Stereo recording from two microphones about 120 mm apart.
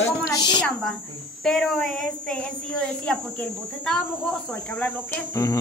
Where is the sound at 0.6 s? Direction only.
10° left (ahead or behind).